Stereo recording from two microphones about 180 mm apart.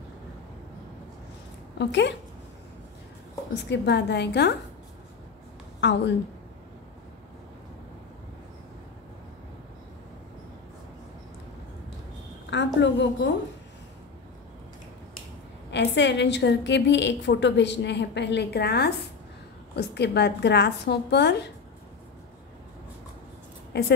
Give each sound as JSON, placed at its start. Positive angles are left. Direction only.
{"t": 1.8, "sound": "a woman's voice", "side_deg": 75}
{"t": 3.7, "sound": "a woman's voice", "side_deg": 70}
{"t": 5.8, "sound": "a woman's voice", "side_deg": 75}
{"t": 12.4, "sound": "a woman's voice", "side_deg": 85}
{"t": 15.7, "sound": "a woman's voice", "side_deg": 75}
{"t": 23.7, "sound": "a woman's voice", "side_deg": 70}